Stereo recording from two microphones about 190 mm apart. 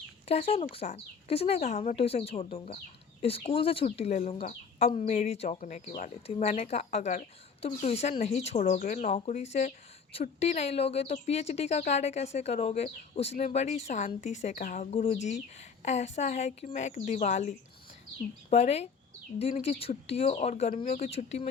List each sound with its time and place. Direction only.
0.3 s speech: 30° left (ahead or behind)
18.5 s speech: 35° left (ahead or behind)